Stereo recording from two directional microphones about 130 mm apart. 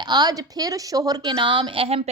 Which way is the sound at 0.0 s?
35° right (ahead or behind).